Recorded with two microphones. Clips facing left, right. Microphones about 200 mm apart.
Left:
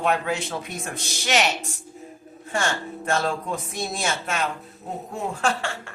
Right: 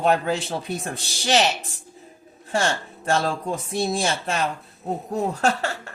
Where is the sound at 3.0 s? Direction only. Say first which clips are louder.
Right 2 dB; 30° right (ahead or behind).